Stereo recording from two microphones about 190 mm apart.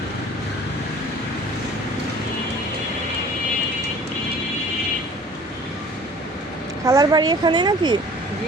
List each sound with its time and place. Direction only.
6.8 s a woman's voice: 20° right (ahead or behind)